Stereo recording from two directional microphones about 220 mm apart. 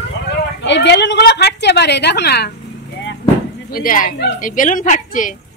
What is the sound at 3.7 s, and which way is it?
A woman's voice, 40° left (ahead or behind).